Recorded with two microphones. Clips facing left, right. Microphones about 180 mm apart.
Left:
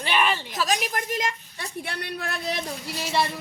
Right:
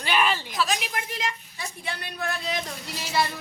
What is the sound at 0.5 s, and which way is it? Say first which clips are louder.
A woman's voice: left 1 dB; 40° left (ahead or behind).